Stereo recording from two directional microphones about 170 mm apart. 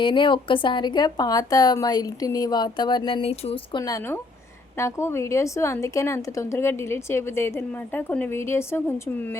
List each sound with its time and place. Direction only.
0.0 s a woman's voice: 30° left (ahead or behind)